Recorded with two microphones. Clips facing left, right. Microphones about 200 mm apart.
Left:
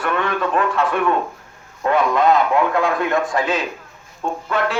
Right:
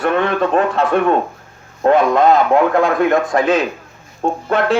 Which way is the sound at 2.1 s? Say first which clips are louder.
Right 4 dB; 45° right (ahead or behind).